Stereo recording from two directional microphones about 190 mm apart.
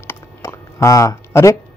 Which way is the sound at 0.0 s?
10° left (ahead or behind).